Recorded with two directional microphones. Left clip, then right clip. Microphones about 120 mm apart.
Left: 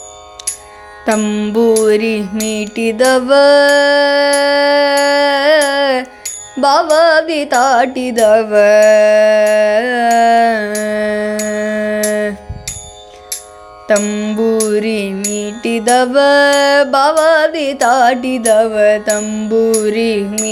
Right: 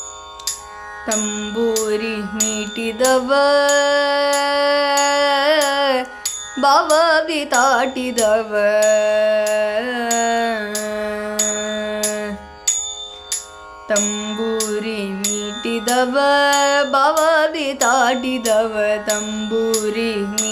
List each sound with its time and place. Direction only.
1.2 s music: 55° left (ahead or behind)
1.8 s music: 75° left (ahead or behind)
2.5 s music: 60° left (ahead or behind); by 6.8 s 40° left (ahead or behind)
6.9 s carnatic music: 40° left (ahead or behind)
10.8 s music: 60° left (ahead or behind)
13.8 s music: 60° left (ahead or behind)
19.2 s music: 25° left (ahead or behind)
19.5 s music: 40° left (ahead or behind)